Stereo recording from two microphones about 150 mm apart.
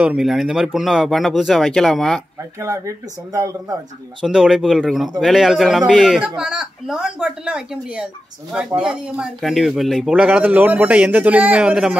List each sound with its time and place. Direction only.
0.0 s speech: 5° right (ahead or behind)
2.6 s speech: 20° right (ahead or behind)
4.2 s speech: 5° right (ahead or behind)